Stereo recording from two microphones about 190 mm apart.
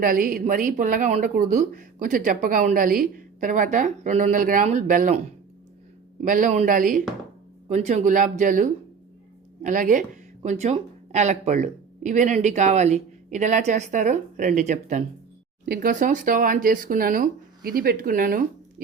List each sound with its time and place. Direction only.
0.0 s speech: 50° right (ahead or behind)